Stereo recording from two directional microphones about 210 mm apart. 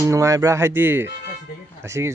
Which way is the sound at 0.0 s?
15° right (ahead or behind).